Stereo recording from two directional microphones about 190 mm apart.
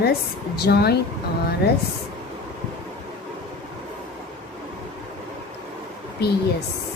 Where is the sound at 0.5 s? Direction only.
55° left (ahead or behind).